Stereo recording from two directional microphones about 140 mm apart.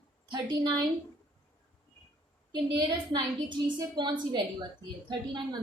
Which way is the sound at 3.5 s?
30° right (ahead or behind).